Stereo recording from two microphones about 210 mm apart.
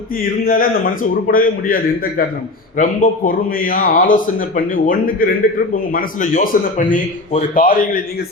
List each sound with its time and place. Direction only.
0.4 s a man's voice: 45° left (ahead or behind)